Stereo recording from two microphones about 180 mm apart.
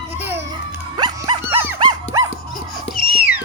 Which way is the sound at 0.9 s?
25° right (ahead or behind).